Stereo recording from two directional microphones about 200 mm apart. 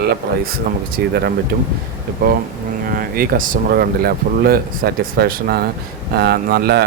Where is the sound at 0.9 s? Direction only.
50° right (ahead or behind).